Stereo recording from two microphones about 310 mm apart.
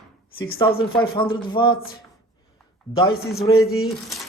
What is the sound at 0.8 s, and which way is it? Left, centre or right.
Speech, centre.